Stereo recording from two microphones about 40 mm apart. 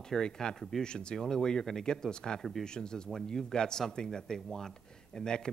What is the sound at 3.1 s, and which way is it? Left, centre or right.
Speech, centre.